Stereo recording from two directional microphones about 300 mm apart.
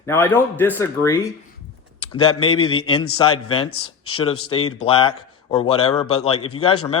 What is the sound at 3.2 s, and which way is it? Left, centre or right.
Speech, left.